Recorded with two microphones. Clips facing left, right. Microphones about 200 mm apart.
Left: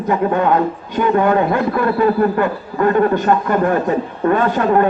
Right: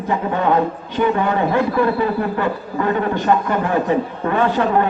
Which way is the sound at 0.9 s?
50° left (ahead or behind).